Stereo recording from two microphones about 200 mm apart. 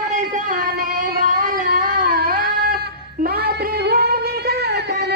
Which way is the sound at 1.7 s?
45° right (ahead or behind).